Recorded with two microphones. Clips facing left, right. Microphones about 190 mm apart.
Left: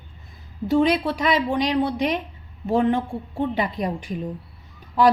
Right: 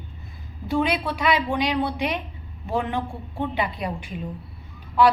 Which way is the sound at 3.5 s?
40° left (ahead or behind).